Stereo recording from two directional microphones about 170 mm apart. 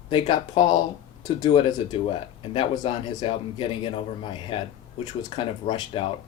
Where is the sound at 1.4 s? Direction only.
30° left (ahead or behind).